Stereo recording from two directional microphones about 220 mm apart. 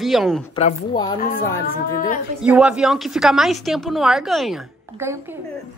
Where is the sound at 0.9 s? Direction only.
20° left (ahead or behind).